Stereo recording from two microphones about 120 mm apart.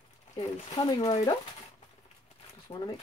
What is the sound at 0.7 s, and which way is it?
Speech, 35° left (ahead or behind).